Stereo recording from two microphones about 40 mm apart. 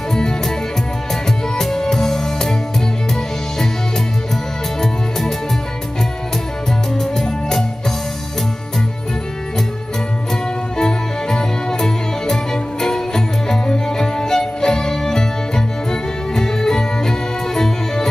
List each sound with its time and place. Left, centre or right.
0.1 s music: centre
1.6 s music: centre
10.8 s music: centre